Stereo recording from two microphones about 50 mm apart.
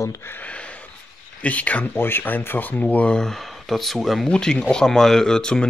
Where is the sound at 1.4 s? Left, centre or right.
Left.